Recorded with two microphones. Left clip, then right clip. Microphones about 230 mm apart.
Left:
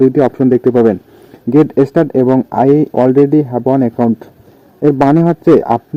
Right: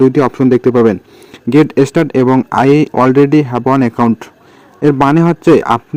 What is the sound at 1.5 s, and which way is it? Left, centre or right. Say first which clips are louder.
Speech: even; centre.